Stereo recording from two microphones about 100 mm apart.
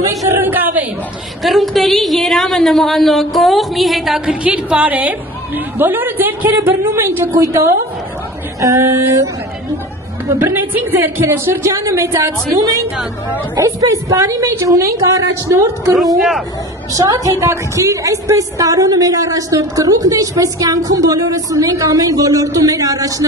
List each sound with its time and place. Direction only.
0.4 s a sound: 20° right (ahead or behind)
1.4 s a woman's voice: centre (ahead or behind); by 7.4 s 25° right (ahead or behind)
8.5 s a woman's voice: 35° right (ahead or behind)
10.4 s a woman's voice: 20° right (ahead or behind)
15.9 s a woman's voice: centre (ahead or behind)
16.9 s a woman's voice: 35° right (ahead or behind)